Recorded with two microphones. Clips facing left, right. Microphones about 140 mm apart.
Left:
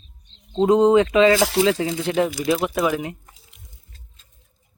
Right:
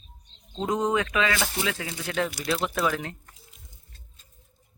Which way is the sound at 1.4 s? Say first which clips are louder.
Left 11 dB; 90° left.